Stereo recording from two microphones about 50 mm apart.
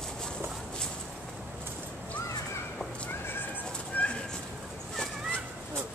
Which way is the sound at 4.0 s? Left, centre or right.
Left.